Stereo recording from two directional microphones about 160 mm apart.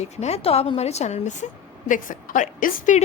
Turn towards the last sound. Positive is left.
turn(degrees=50)  # may be behind; listen again after turning